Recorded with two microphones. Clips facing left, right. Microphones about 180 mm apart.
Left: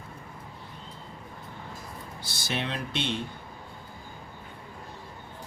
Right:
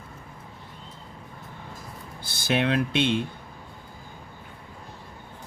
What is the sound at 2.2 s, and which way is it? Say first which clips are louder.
Speech: right 8 dB; 55° right (ahead or behind).